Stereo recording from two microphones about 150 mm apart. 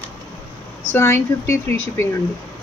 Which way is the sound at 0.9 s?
15° left (ahead or behind).